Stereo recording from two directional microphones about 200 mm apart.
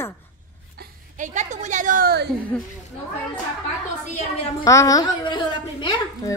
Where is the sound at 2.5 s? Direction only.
5° left (ahead or behind).